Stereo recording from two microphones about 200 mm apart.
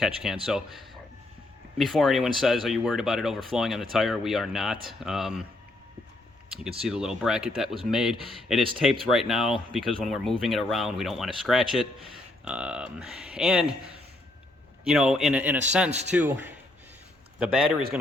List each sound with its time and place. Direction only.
0.0 s speech: centre (ahead or behind)
6.5 s speech: 5° right (ahead or behind)
14.8 s a man's voice: 5° right (ahead or behind)